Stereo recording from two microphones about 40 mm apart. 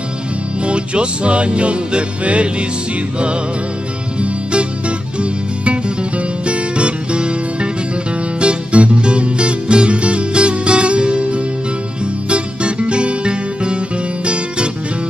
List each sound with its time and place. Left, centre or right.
0.7 s music: right
4.2 s music: right